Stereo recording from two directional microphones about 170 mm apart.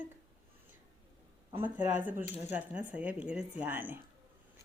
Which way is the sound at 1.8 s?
50° right (ahead or behind).